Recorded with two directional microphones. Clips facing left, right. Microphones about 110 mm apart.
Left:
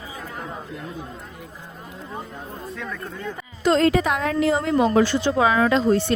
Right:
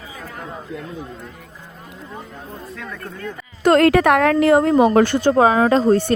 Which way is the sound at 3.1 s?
20° left (ahead or behind).